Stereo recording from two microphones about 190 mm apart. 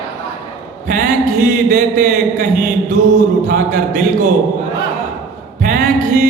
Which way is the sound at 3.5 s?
45° right (ahead or behind).